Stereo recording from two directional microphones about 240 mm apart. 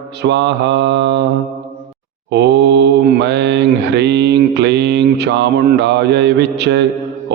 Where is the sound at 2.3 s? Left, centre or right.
Right.